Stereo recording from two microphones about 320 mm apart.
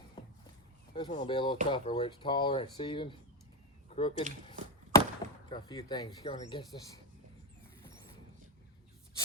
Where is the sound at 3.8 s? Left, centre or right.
Centre.